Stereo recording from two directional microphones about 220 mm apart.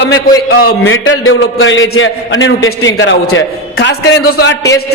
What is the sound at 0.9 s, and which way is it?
A man's voice, 65° left (ahead or behind).